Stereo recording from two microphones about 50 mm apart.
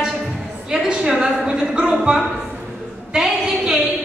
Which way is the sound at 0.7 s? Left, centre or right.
Centre.